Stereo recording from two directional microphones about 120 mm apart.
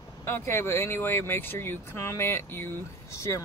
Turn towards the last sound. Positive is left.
turn(degrees=25)  # may be behind; listen again after turning